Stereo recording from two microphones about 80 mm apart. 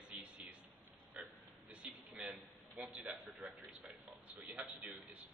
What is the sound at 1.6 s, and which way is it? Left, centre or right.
A man's voice, centre.